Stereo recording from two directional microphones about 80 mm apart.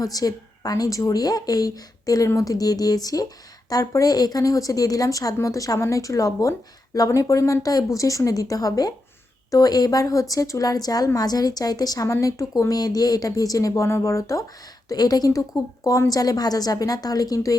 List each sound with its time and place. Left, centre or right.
0.0 s a woman's voice: left
12.0 s a woman's voice: left
14.8 s a woman's voice: left